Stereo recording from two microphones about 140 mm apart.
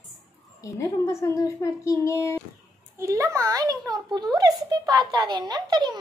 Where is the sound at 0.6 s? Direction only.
20° left (ahead or behind).